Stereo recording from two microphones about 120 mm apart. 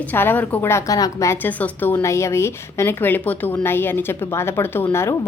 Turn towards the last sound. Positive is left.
turn(degrees=20)  # may be behind; listen again after turning